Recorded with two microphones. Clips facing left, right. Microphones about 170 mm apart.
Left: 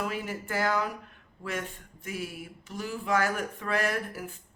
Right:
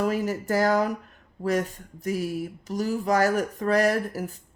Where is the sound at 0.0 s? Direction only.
40° right (ahead or behind).